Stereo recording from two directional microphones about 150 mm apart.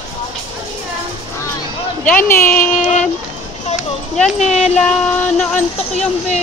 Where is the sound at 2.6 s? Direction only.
50° left (ahead or behind).